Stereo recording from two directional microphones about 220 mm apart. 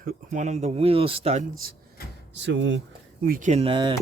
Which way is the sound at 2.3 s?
55° right (ahead or behind).